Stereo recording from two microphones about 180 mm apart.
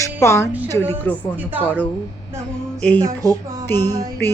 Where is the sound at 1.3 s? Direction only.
10° right (ahead or behind).